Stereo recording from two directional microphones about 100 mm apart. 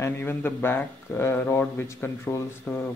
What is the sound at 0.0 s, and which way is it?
Speech, 20° left (ahead or behind).